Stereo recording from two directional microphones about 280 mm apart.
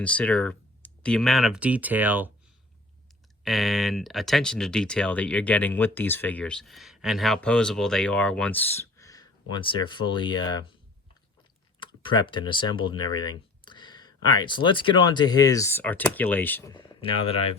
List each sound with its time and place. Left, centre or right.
0.0 s speech: centre
3.4 s speech: centre
12.0 s speech: centre